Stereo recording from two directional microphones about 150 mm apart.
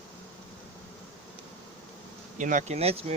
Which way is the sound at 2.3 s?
55° right (ahead or behind).